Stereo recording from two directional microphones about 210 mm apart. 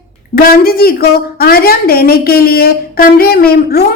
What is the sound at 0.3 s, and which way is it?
A woman's voice, 45° left (ahead or behind).